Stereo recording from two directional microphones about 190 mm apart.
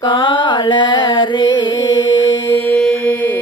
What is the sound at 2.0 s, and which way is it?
Mantra, 80° left.